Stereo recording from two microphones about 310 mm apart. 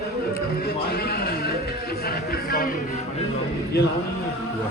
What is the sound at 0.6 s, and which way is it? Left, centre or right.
Music, left.